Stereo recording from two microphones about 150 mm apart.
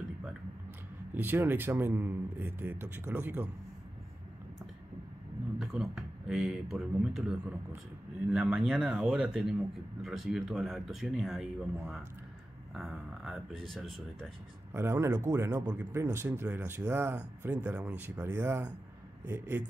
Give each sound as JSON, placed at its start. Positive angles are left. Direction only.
{"t": 1.1, "sound": "speech", "side_deg": -15}
{"t": 5.6, "sound": "a man's voice", "side_deg": -5}
{"t": 14.7, "sound": "speech", "side_deg": -15}